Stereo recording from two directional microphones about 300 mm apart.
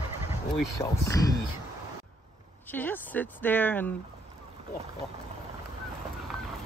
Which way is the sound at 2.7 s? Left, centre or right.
Centre.